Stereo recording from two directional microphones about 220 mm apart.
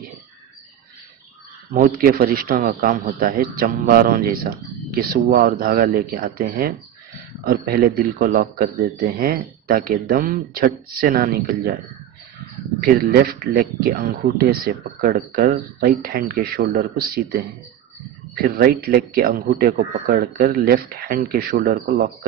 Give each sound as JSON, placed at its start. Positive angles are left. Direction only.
{"t": 1.7, "sound": "a man's voice", "side_deg": -40}
{"t": 12.8, "sound": "a man's voice", "side_deg": -40}